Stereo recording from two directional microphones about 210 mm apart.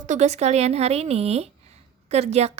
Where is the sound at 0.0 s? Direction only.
35° right (ahead or behind).